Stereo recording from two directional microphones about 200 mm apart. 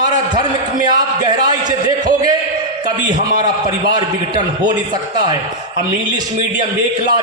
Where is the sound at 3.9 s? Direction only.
20° right (ahead or behind).